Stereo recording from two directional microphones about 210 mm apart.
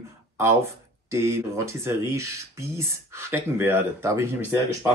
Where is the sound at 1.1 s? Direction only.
15° right (ahead or behind).